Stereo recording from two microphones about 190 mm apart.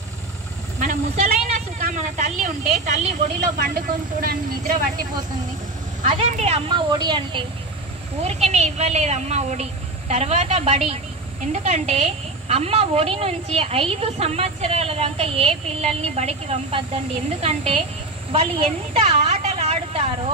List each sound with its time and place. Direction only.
0.7 s vehicle: 45° right (ahead or behind)
1.8 s a woman's voice: 40° right (ahead or behind)
3.5 s speech: 50° right (ahead or behind)
6.0 s a woman's voice: 35° right (ahead or behind)
8.2 s a woman's voice: 35° right (ahead or behind)
18.3 s a sound: 30° right (ahead or behind)